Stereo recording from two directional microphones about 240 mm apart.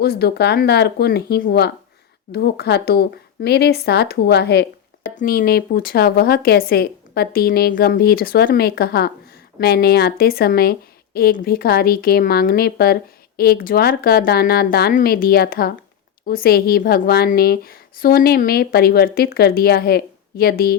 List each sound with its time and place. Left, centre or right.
0.0 s a woman's voice: left